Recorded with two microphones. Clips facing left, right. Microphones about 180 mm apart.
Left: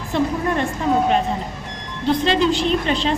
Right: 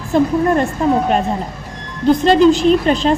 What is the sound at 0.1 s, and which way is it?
Speech, 45° right (ahead or behind).